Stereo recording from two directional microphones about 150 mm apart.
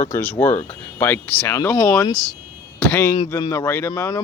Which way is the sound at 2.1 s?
25° right (ahead or behind).